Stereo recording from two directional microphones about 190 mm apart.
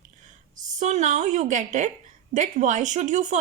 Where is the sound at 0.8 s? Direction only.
40° right (ahead or behind).